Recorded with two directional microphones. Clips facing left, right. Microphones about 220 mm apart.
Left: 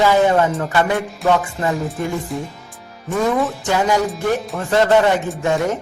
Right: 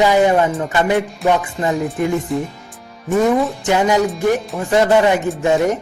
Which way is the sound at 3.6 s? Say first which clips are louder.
Right 3 dB; 20° right (ahead or behind).